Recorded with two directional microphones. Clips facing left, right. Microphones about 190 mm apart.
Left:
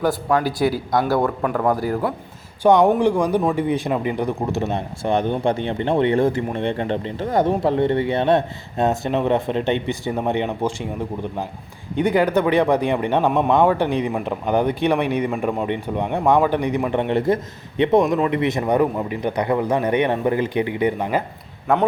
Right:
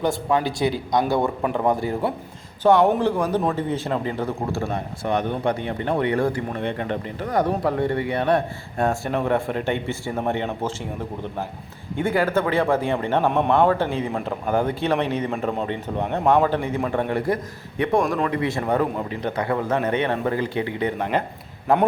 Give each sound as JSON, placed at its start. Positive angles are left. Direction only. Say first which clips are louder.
{"t": 0.4, "sound": "speech", "louder": "left 3 dB", "side_deg": -20}
{"t": 2.6, "sound": "a man's voice", "louder": "left 2 dB", "side_deg": 15}